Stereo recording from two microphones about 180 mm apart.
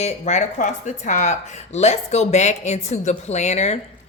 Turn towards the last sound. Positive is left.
turn(degrees=40)  # may be behind; listen again after turning